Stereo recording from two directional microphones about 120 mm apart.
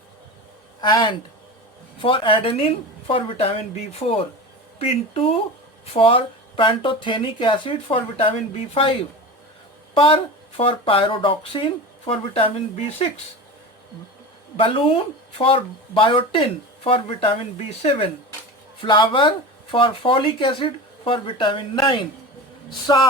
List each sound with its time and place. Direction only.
0.8 s speech: 40° left (ahead or behind); by 13.1 s 55° left (ahead or behind)
14.5 s speech: 50° left (ahead or behind)